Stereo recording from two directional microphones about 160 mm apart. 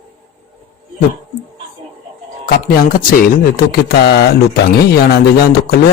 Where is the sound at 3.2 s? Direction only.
70° left (ahead or behind).